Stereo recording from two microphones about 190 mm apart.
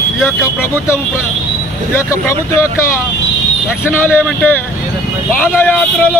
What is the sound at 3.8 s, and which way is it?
A man's voice, 10° left (ahead or behind).